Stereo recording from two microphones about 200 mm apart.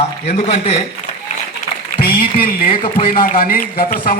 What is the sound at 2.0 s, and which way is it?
A man's voice, 50° left (ahead or behind).